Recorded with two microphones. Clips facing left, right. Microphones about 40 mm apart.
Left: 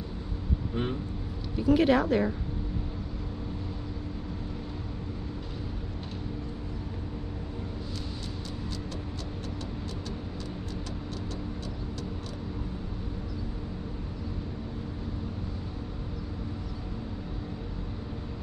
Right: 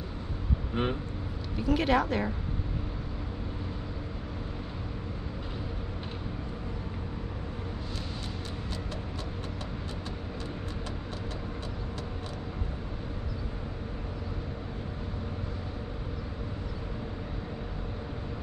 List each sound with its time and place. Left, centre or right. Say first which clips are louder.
0.8 s speech: right 2 dB; right
1.6 s a woman's voice: left 3 dB; centre